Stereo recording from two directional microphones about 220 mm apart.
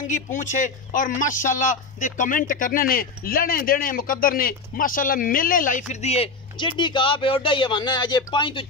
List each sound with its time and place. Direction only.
0.0 s speech: 35° left (ahead or behind)